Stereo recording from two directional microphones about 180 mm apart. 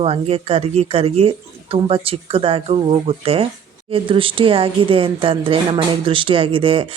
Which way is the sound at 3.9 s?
30° right (ahead or behind).